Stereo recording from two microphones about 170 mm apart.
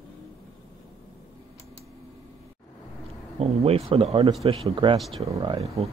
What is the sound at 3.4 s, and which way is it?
Speech, 35° right (ahead or behind).